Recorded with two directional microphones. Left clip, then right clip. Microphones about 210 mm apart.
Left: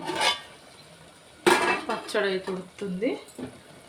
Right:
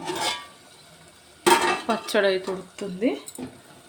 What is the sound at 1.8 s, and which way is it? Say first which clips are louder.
Dishes: right 5 dB; 45° right (ahead or behind).